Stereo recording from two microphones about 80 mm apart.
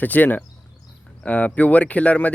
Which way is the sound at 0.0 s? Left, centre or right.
Left.